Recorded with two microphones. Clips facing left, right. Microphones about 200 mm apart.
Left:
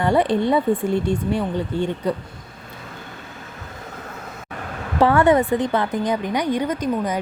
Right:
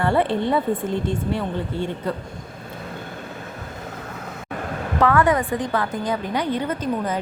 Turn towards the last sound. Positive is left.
turn(degrees=15)  # may be behind; listen again after turning